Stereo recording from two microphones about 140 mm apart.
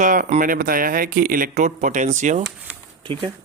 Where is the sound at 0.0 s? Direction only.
65° right (ahead or behind).